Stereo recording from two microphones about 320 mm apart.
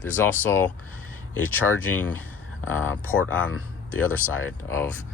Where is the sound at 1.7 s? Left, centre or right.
Centre.